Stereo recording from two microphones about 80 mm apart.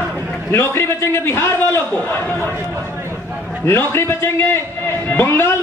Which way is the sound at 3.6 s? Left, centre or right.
Left.